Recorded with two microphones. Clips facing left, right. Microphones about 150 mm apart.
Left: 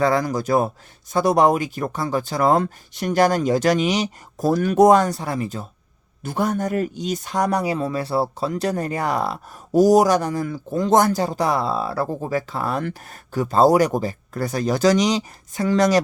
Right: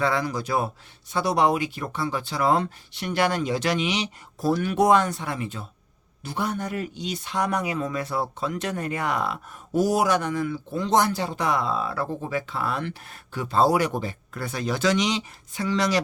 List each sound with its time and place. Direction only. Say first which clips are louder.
0.0 s speech: left 5 dB; 40° left (ahead or behind)